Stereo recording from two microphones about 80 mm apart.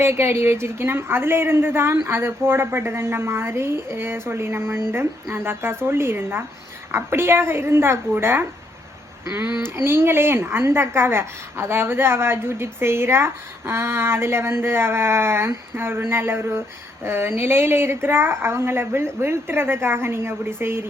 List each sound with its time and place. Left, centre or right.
0.0 s a woman's voice: right
9.6 s a woman's voice: right